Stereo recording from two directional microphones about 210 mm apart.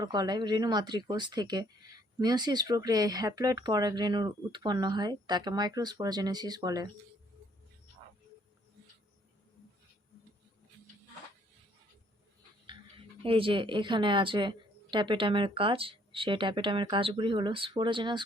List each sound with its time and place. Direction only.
0.0 s a woman's voice: 20° right (ahead or behind)
13.2 s a woman's voice: 25° right (ahead or behind)